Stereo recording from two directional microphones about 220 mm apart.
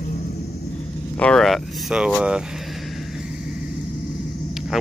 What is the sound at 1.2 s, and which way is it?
Speech, centre (ahead or behind).